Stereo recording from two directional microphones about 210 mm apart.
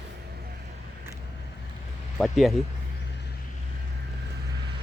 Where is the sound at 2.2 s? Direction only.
Centre (ahead or behind).